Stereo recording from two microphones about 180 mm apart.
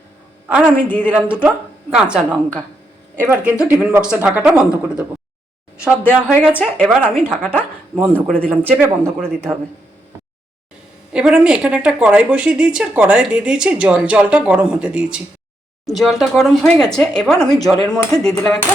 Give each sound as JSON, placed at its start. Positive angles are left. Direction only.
{"t": 0.6, "sound": "a woman's voice", "side_deg": 10}
{"t": 1.1, "sound": "speech", "side_deg": -5}
{"t": 6.1, "sound": "speech", "side_deg": -5}
{"t": 6.6, "sound": "a woman's voice", "side_deg": 10}
{"t": 7.9, "sound": "speech", "side_deg": -10}
{"t": 8.3, "sound": "a woman's voice", "side_deg": 5}
{"t": 9.0, "sound": "speech", "side_deg": -15}
{"t": 11.1, "sound": "speech", "side_deg": -5}
{"t": 17.5, "sound": "speech", "side_deg": 20}
{"t": 17.9, "sound": "speech", "side_deg": 5}